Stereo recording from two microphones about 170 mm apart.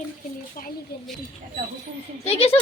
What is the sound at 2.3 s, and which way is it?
Speech, 35° left (ahead or behind).